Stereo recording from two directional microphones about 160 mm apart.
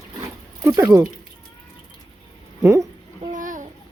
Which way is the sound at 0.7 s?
15° right (ahead or behind).